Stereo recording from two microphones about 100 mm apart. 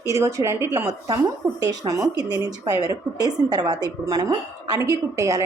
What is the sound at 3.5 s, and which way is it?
A woman's voice, 40° right (ahead or behind).